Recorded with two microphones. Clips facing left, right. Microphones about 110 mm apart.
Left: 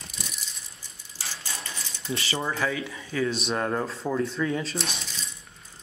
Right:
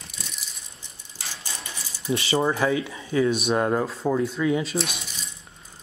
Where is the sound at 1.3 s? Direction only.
10° right (ahead or behind).